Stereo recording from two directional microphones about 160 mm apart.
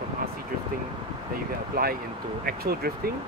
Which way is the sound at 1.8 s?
70° right (ahead or behind).